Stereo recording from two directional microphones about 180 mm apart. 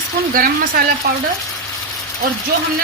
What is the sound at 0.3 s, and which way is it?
Speech, 50° right (ahead or behind).